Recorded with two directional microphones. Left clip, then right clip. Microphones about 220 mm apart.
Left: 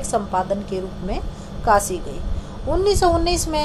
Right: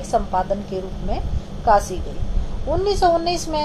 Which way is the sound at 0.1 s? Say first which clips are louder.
Right 1 dB; 35° left (ahead or behind).